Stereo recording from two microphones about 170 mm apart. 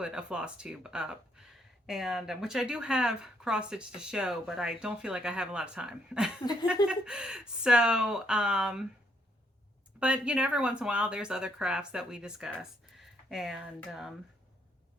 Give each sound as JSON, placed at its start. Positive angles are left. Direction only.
{"t": 0.0, "sound": "speech", "side_deg": -5}
{"t": 6.4, "sound": "speech", "side_deg": 25}
{"t": 6.8, "sound": "speech", "side_deg": -5}
{"t": 10.0, "sound": "speech", "side_deg": -5}